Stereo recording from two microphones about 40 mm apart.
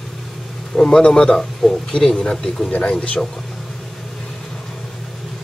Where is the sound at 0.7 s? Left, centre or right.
Centre.